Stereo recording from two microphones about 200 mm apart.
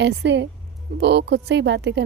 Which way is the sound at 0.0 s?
60° right (ahead or behind).